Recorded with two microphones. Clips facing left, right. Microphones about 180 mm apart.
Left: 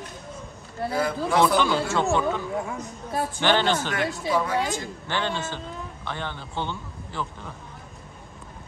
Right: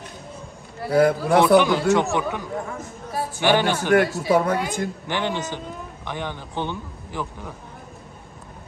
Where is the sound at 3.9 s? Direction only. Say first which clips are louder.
Right 8 dB; 55° right (ahead or behind).